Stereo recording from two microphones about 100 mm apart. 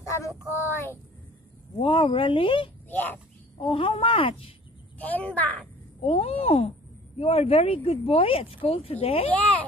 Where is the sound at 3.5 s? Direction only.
60° left (ahead or behind).